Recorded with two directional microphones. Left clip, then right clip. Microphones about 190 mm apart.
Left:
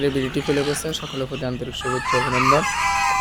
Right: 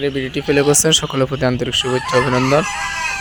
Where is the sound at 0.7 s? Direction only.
40° right (ahead or behind); by 1.8 s 25° right (ahead or behind).